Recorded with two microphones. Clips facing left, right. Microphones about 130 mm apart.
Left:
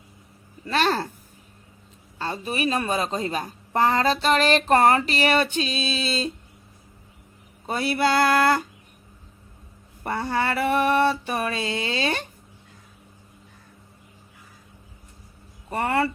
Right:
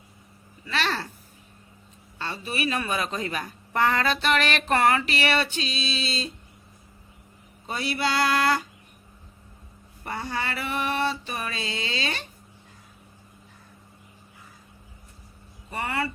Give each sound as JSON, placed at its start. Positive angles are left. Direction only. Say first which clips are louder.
{"t": 0.6, "sound": "mantra", "louder": "left 6 dB", "side_deg": 45}
{"t": 2.1, "sound": "a woman's voice", "louder": "left 3 dB", "side_deg": 40}
{"t": 7.7, "sound": "mantra", "louder": "left 5 dB", "side_deg": 50}
{"t": 10.0, "sound": "mantra", "louder": "left 6 dB", "side_deg": 50}
{"t": 15.7, "sound": "mantra", "louder": "left 6 dB", "side_deg": 50}